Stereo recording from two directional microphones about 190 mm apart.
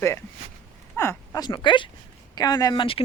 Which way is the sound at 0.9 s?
15° left (ahead or behind).